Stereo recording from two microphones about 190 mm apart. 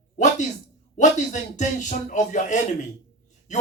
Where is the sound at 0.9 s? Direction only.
40° left (ahead or behind).